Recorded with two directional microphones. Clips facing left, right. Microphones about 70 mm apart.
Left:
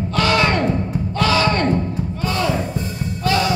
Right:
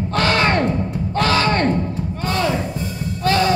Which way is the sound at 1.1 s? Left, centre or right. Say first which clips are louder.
Even; right.